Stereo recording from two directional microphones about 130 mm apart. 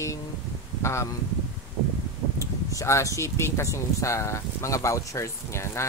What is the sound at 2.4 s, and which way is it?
Speech, 25° left (ahead or behind).